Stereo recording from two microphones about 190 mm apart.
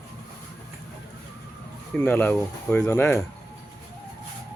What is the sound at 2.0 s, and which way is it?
Speech, 10° left (ahead or behind).